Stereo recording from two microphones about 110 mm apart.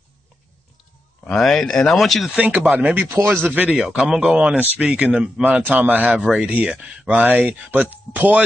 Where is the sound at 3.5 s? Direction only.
10° right (ahead or behind).